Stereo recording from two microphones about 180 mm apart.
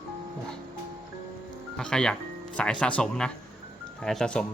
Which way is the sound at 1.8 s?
5° left (ahead or behind).